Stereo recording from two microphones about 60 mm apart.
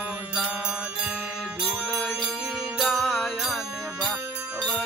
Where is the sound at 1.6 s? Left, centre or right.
Centre.